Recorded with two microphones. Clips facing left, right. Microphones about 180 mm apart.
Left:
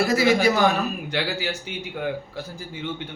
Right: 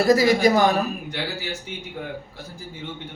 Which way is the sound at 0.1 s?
40° right (ahead or behind).